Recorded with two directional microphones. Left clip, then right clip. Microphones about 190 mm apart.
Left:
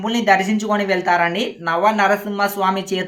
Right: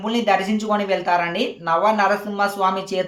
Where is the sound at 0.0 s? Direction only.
15° left (ahead or behind).